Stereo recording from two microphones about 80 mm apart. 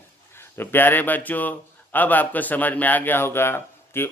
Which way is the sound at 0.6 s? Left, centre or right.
Left.